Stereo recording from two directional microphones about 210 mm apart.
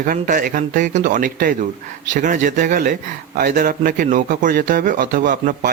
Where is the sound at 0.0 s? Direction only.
40° right (ahead or behind).